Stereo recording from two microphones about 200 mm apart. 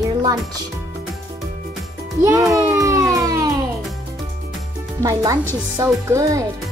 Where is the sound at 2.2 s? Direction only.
15° right (ahead or behind).